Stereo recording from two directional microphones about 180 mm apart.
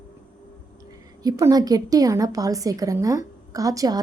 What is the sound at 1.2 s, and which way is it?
A woman's voice, 20° right (ahead or behind).